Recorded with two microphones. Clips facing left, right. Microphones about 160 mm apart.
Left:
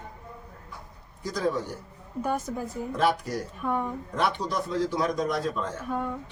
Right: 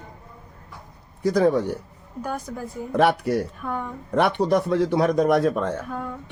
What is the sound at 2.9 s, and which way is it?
Speech, 65° right (ahead or behind).